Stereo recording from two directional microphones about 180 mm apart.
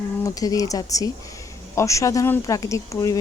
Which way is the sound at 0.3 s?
20° left (ahead or behind).